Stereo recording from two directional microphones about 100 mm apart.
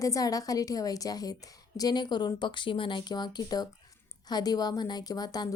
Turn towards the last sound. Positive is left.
turn(degrees=40)  # may be behind; listen again after turning